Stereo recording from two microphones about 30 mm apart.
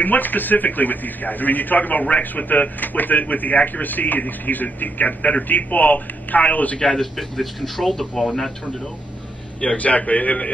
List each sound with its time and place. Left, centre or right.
0.0 s a man's voice: left
7.0 s speech: centre
9.8 s a man's voice: left